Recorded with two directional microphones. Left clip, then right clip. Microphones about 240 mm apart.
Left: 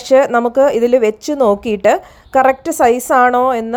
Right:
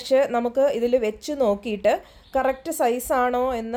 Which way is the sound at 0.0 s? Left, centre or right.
Left.